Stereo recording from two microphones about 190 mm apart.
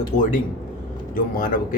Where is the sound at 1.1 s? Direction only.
45° left (ahead or behind).